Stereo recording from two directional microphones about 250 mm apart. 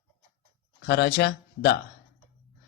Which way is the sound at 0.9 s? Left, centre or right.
Left.